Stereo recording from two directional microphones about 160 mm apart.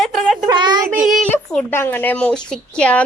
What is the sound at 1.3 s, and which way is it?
Speech, 15° left (ahead or behind).